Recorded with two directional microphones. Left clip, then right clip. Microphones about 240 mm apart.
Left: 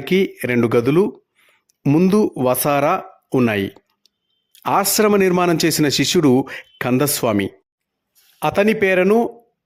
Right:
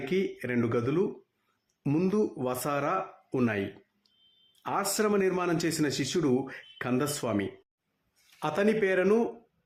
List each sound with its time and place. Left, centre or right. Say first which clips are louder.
0.0 s speech: left 12 dB; left